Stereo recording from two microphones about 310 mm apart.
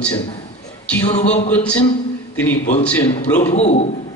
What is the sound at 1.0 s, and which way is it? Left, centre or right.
Speech, left.